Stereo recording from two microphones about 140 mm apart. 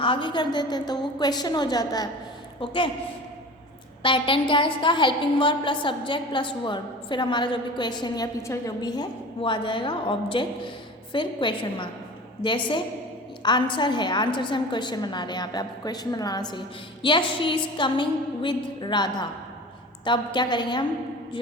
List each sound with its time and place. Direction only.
0.0 s a woman's voice: 35° left (ahead or behind)
4.0 s a woman's voice: 35° left (ahead or behind)